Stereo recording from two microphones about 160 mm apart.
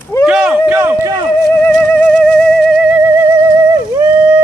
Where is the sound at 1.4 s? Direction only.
10° left (ahead or behind); by 4.1 s 20° right (ahead or behind).